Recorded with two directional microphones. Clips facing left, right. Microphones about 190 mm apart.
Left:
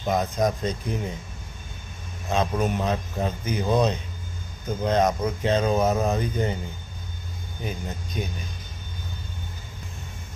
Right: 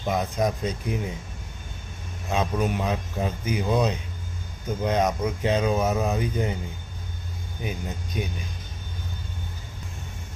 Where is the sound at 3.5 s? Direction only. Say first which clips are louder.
Left 2 dB; 10° right (ahead or behind).